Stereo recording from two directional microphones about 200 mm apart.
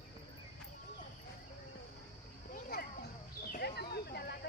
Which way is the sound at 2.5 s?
50° left (ahead or behind).